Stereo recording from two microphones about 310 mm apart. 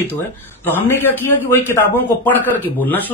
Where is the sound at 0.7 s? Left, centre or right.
Centre.